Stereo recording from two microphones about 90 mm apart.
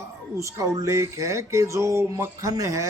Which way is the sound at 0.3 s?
35° right (ahead or behind).